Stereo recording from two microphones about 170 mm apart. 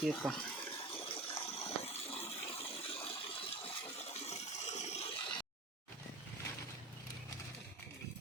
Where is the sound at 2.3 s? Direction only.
35° left (ahead or behind).